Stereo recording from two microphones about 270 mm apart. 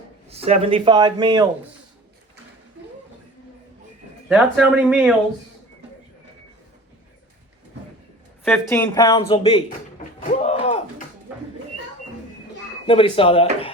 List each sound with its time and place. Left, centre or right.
0.3 s speech: right
4.3 s speech: centre
8.4 s speech: centre
10.2 s a sound: left
12.9 s speech: centre